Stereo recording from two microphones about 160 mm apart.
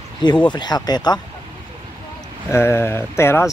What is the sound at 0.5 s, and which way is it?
Speech, 25° left (ahead or behind).